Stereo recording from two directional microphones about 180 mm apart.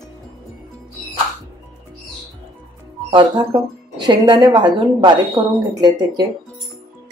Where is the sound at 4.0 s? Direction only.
25° right (ahead or behind).